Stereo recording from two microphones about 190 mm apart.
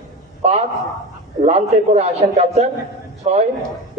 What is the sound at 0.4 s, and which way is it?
A man's voice, 35° right (ahead or behind).